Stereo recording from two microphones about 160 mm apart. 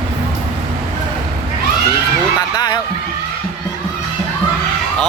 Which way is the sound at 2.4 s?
30° left (ahead or behind).